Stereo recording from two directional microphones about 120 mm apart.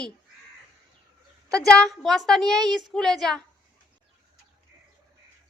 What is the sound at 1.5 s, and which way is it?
A woman's voice, 5° left (ahead or behind).